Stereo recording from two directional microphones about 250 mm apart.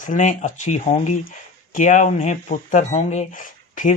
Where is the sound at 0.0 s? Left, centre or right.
Left.